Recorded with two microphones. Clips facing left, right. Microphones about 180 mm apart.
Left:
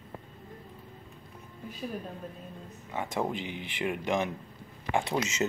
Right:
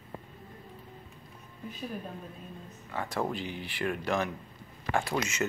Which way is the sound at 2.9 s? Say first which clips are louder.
Left 1 dB; 15° left (ahead or behind).